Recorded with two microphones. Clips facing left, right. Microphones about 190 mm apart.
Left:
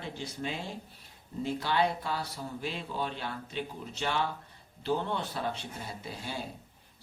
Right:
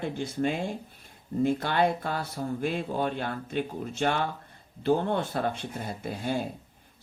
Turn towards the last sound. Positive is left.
turn(degrees=-50)  # may be behind; listen again after turning